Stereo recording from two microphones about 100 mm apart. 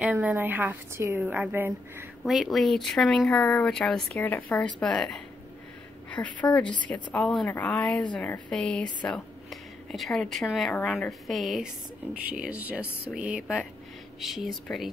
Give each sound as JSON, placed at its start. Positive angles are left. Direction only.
{"t": 0.0, "sound": "a woman's voice", "side_deg": -15}
{"t": 2.2, "sound": "a woman's voice", "side_deg": 0}